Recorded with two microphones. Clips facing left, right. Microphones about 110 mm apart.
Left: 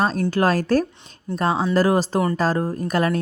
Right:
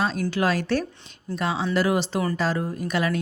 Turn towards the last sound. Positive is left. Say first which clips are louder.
# left 4 dB
turn(degrees=40)  # may be behind; listen again after turning